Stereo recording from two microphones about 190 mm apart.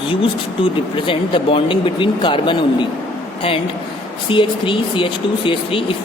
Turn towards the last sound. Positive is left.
turn(degrees=25)  # may be behind; listen again after turning